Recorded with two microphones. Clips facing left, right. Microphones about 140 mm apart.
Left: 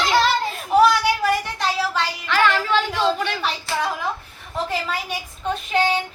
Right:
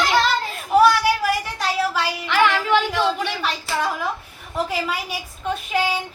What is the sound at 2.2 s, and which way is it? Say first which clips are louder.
Music: right 1 dB; 15° right (ahead or behind).